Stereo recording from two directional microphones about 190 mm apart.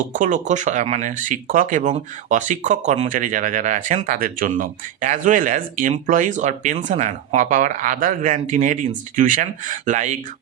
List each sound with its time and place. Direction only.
0.1 s speech: 40° right (ahead or behind)